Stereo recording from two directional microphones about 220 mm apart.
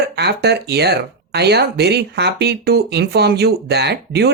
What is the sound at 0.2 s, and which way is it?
Speech, 50° right (ahead or behind).